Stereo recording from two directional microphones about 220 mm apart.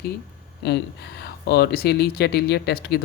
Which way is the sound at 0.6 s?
50° left (ahead or behind).